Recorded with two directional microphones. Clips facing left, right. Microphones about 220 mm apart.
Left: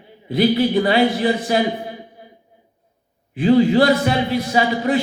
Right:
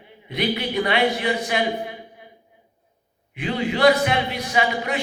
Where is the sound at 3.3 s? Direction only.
35° left (ahead or behind).